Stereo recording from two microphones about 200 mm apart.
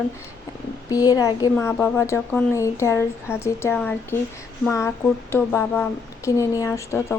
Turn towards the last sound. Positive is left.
turn(degrees=15)  # may be behind; listen again after turning